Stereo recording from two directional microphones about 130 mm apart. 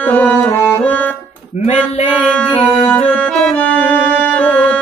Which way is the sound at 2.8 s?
10° left (ahead or behind).